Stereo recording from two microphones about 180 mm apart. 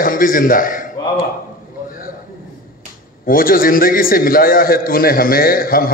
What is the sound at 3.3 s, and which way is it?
A man's voice, 50° left (ahead or behind).